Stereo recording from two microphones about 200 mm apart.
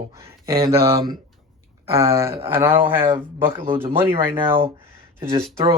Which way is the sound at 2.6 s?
10° right (ahead or behind).